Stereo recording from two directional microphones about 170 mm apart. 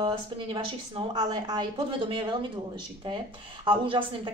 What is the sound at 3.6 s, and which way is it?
Speech, 30° right (ahead or behind).